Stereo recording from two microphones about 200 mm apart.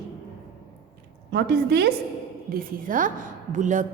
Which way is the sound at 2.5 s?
45° right (ahead or behind).